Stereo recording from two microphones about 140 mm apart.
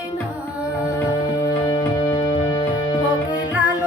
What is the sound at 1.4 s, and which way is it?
Music, 30° left (ahead or behind).